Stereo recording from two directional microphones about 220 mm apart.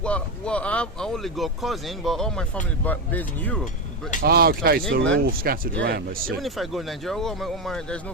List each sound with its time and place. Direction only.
0.0 s speech: 5° left (ahead or behind)
4.2 s speech: 45° right (ahead or behind)
6.4 s speech: centre (ahead or behind)